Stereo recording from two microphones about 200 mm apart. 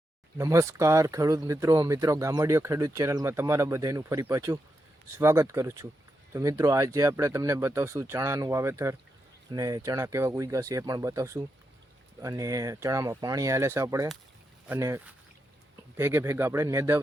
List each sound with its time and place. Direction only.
0.3 s speech: 15° right (ahead or behind)